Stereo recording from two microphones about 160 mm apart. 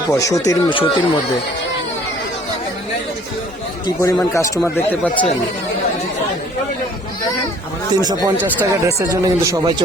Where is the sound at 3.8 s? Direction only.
20° left (ahead or behind).